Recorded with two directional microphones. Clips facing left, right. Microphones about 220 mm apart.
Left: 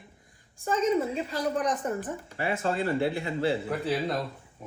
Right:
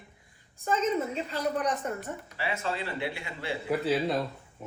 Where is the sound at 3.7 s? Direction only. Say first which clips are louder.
Right 2 dB; 5° right (ahead or behind).